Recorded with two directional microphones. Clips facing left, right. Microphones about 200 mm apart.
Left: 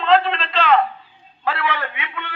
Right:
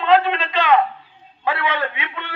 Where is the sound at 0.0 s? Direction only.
10° right (ahead or behind).